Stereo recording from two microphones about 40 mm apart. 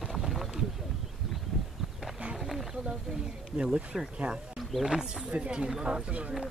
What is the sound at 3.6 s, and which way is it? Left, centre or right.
Speech, right.